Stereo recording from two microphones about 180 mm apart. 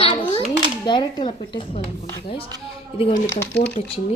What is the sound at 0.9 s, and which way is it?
Speech, 25° left (ahead or behind).